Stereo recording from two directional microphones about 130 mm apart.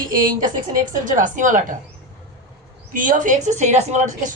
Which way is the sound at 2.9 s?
90° right.